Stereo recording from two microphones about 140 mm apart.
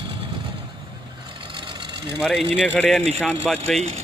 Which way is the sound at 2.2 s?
Centre (ahead or behind).